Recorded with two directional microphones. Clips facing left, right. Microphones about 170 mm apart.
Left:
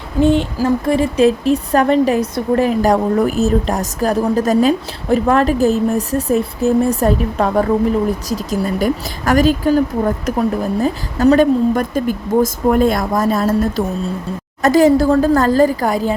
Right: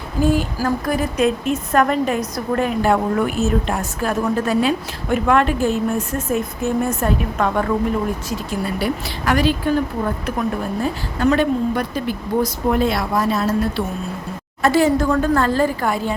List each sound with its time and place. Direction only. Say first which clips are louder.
0.2 s a woman's voice: left 5 dB; 25° left (ahead or behind)